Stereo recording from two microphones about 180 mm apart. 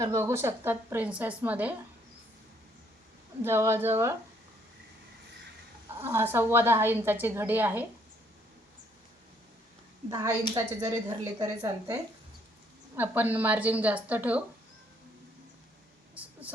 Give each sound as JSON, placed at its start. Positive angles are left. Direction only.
{"t": 0.0, "sound": "a woman's voice", "side_deg": -15}
{"t": 3.4, "sound": "a woman's voice", "side_deg": -15}
{"t": 6.0, "sound": "a woman's voice", "side_deg": -15}
{"t": 10.1, "sound": "a woman's voice", "side_deg": -20}
{"t": 13.0, "sound": "a woman's voice", "side_deg": -10}
{"t": 16.2, "sound": "a sound", "side_deg": -10}